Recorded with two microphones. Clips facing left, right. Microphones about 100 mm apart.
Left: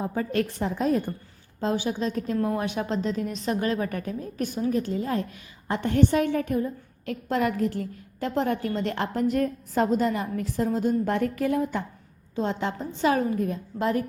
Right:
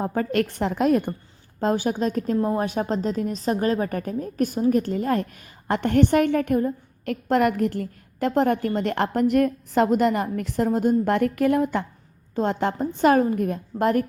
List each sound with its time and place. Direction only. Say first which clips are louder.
0.0 s a woman's voice: right 3 dB; 55° right (ahead or behind)
1.6 s a woman's voice: right 4 dB; 45° right (ahead or behind); by 11.9 s 65° right (ahead or behind)
12.4 s a woman's voice: right 5 dB; 55° right (ahead or behind)